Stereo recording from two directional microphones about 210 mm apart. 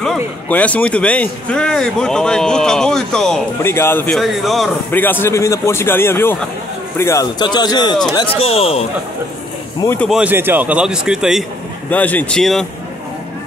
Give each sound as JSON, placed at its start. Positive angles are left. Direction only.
{"t": 0.0, "sound": "speech", "side_deg": 5}
{"t": 9.8, "sound": "speech", "side_deg": 10}
{"t": 10.0, "sound": "speech", "side_deg": -5}
{"t": 11.9, "sound": "speech", "side_deg": 10}